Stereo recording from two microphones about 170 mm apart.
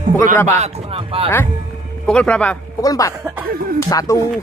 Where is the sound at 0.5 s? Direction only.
40° right (ahead or behind).